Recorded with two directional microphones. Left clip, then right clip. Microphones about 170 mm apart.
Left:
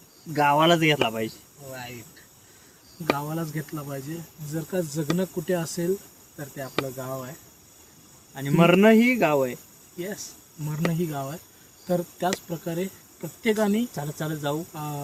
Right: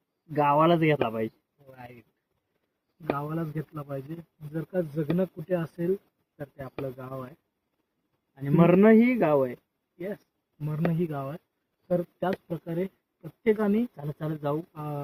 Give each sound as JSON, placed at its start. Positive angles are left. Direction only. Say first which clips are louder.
{"t": 0.3, "sound": "speech", "louder": "left 2 dB", "side_deg": 35}
{"t": 3.2, "sound": "cricket", "louder": "left 2 dB", "side_deg": 50}
{"t": 4.7, "sound": "speech", "louder": "left 1 dB", "side_deg": 60}
{"t": 5.1, "sound": "cricket", "louder": "left 2 dB", "side_deg": 50}
{"t": 8.4, "sound": "speech", "louder": "left 2 dB", "side_deg": 35}
{"t": 10.7, "sound": "cricket", "louder": "left 2 dB", "side_deg": 55}
{"t": 13.9, "sound": "speech", "louder": "left 4 dB", "side_deg": 30}
{"t": 14.7, "sound": "cricket", "louder": "left 2 dB", "side_deg": 55}